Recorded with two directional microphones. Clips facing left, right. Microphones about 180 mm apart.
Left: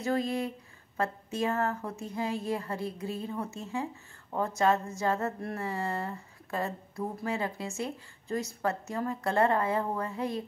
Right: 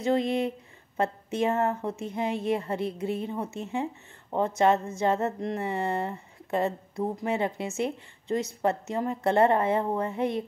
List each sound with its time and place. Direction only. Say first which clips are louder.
0.0 s a woman's voice: right 5 dB; 20° right (ahead or behind)